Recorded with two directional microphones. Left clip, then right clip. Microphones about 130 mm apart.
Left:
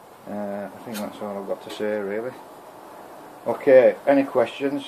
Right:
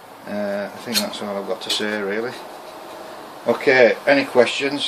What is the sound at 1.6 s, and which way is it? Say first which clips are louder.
Speech: right 4 dB; 35° left (ahead or behind).